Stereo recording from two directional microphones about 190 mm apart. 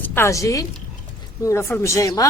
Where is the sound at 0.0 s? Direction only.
10° left (ahead or behind).